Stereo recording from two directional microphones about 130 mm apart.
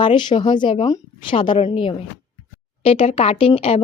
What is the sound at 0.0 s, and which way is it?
Speech, 35° left (ahead or behind).